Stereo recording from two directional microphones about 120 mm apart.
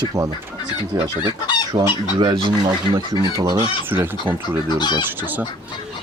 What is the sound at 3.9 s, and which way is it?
Speech, 20° right (ahead or behind).